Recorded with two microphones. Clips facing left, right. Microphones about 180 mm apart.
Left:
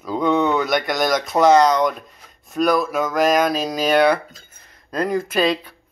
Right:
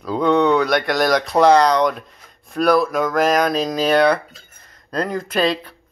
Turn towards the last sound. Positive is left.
turn(degrees=5)  # may be behind; listen again after turning